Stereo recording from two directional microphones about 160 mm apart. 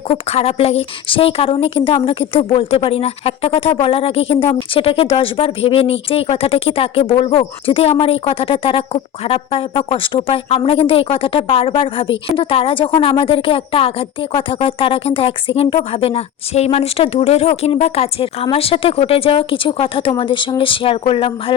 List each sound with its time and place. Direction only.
0.1 s a woman's voice: 40° left (ahead or behind)